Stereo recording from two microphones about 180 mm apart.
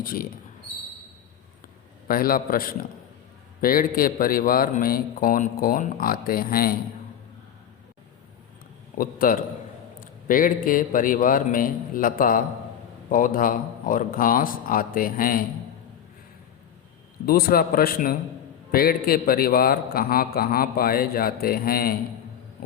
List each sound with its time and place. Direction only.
0.0 s speech: 55° left (ahead or behind)
2.0 s a man's voice: 55° left (ahead or behind)
9.0 s a man's voice: 50° left (ahead or behind)
17.2 s a man's voice: 55° left (ahead or behind)